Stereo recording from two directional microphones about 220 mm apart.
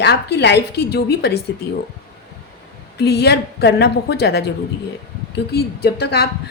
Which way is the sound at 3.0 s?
45° left (ahead or behind).